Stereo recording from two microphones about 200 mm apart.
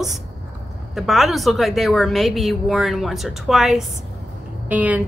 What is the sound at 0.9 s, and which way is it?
A woman's voice, centre (ahead or behind).